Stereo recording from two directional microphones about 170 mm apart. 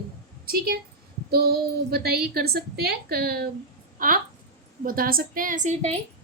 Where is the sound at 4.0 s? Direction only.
55° right (ahead or behind).